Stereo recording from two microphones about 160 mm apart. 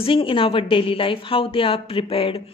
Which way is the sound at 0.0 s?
35° left (ahead or behind).